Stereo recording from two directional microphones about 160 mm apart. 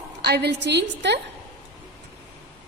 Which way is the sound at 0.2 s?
90° right.